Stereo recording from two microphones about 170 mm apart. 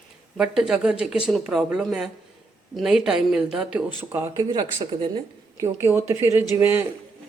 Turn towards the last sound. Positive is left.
turn(degrees=-15)  # may be behind; listen again after turning